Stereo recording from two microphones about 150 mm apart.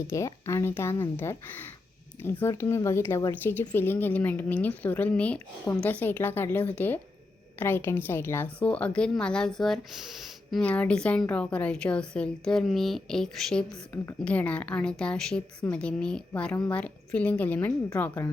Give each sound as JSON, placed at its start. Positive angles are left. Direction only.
{"t": 0.1, "sound": "a woman's voice", "side_deg": 20}